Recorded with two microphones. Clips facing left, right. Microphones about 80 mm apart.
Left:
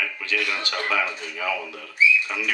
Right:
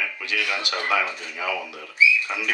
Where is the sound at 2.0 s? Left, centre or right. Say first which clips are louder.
Even; left.